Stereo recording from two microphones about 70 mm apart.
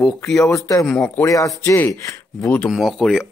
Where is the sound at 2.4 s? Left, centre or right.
Left.